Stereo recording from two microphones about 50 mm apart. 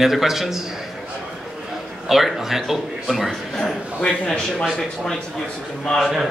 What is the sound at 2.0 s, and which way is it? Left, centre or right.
A man's voice, centre.